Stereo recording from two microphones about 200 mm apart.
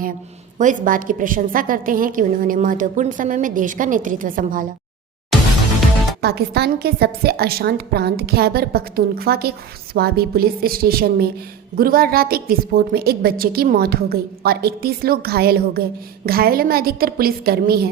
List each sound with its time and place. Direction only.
0.6 s a woman's voice: 40° right (ahead or behind)
6.2 s a woman's voice: 55° right (ahead or behind)